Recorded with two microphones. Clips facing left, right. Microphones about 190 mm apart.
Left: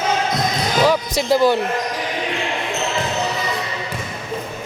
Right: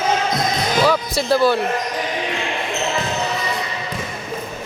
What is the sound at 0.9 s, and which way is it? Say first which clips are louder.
Speech: left 2 dB; 15° left (ahead or behind).